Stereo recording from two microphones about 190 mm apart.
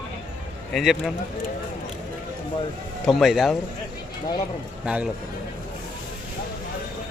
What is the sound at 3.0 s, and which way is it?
Speech, centre (ahead or behind).